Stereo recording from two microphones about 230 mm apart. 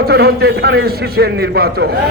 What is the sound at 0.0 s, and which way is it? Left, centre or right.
A man's voice, right.